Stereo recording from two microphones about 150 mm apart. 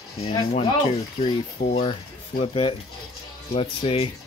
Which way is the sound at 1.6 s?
45° left (ahead or behind).